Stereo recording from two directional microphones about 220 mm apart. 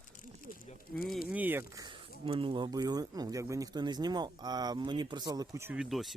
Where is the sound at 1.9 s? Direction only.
25° right (ahead or behind); by 6.1 s centre (ahead or behind).